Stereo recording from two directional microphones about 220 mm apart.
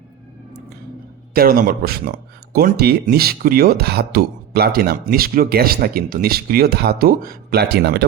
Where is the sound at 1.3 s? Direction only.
40° right (ahead or behind).